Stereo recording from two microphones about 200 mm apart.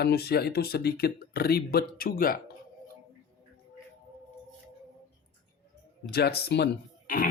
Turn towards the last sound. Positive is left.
turn(degrees=45)  # may be behind; listen again after turning